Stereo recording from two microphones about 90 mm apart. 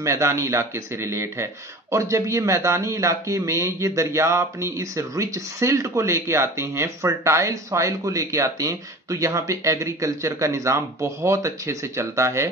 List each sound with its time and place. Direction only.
0.0 s speech: 35° right (ahead or behind)